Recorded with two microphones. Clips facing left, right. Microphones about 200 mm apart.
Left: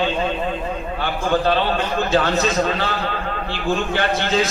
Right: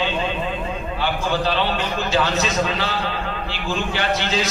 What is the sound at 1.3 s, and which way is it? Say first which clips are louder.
A man's voice: left 6 dB; 55° left (ahead or behind).